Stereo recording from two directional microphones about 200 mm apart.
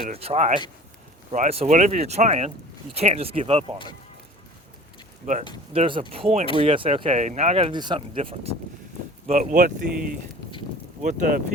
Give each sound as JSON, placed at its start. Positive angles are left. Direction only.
{"t": 0.2, "sound": "speech", "side_deg": -30}
{"t": 5.2, "sound": "speech", "side_deg": -40}
{"t": 5.7, "sound": "speech", "side_deg": -25}
{"t": 9.2, "sound": "speech", "side_deg": -40}